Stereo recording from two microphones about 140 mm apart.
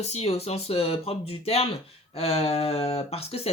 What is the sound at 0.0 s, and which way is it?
Speech, 50° left (ahead or behind).